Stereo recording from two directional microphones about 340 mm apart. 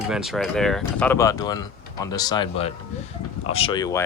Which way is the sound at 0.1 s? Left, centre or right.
Centre.